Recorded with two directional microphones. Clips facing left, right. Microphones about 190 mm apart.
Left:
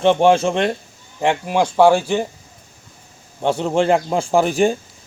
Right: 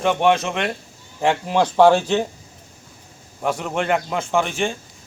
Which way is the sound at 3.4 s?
30° left (ahead or behind).